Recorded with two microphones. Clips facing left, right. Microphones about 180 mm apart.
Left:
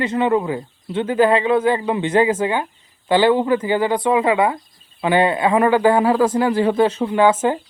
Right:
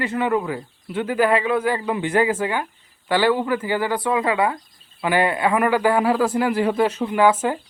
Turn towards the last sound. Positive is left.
turn(degrees=25)  # may be behind; listen again after turning